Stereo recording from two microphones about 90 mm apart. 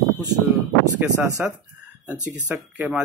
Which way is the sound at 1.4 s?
10° right (ahead or behind).